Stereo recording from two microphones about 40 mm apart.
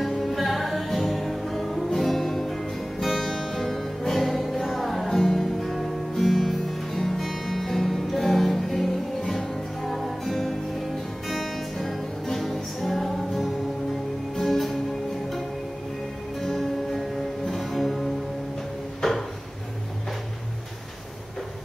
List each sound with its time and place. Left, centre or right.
0.0 s music: centre
16.3 s music: centre
18.9 s a sound: centre